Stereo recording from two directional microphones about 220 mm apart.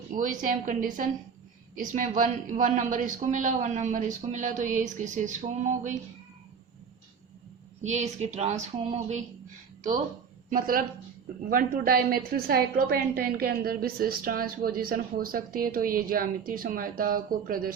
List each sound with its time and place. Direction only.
0.2 s a woman's voice: 35° right (ahead or behind)
7.8 s a woman's voice: 30° right (ahead or behind)
10.5 s a woman's voice: 40° right (ahead or behind)